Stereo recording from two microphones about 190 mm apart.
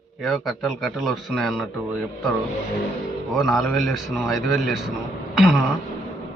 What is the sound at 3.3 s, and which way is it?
A man's voice, centre (ahead or behind).